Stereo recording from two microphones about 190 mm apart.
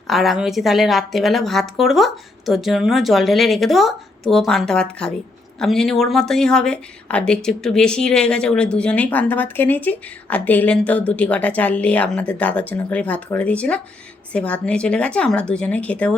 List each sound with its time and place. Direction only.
0.1 s a woman's voice: centre (ahead or behind)